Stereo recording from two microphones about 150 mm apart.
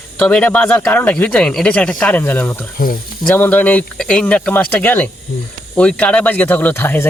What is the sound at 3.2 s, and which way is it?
Speech, 10° left (ahead or behind).